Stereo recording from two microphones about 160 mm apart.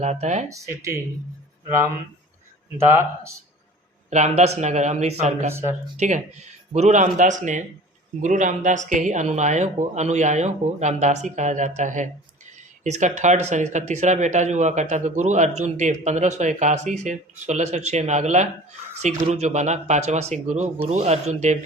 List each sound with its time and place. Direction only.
0.0 s speech: 45° right (ahead or behind)
0.5 s speech: 20° right (ahead or behind)
2.7 s speech: 15° right (ahead or behind)
4.1 s speech: 45° right (ahead or behind)